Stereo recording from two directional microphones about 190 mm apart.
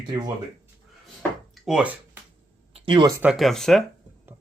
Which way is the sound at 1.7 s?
5° right (ahead or behind).